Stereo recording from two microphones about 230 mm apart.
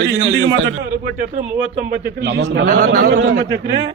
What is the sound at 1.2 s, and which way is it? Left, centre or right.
Speech, right.